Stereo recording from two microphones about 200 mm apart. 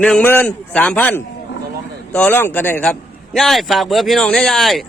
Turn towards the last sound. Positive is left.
turn(degrees=0)  # may be behind; listen again after turning